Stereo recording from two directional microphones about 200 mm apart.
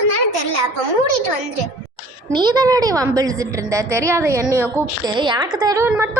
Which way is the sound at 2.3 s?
20° right (ahead or behind).